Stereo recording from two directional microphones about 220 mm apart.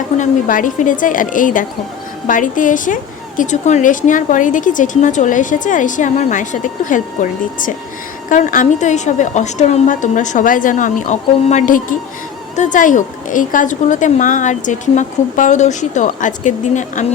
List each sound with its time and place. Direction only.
0.2 s a woman's voice: 35° left (ahead or behind)